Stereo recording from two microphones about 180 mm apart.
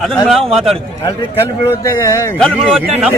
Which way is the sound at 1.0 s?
30° left (ahead or behind).